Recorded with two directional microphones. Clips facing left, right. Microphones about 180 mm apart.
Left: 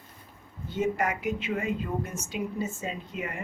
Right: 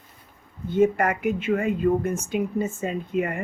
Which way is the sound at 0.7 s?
55° right (ahead or behind).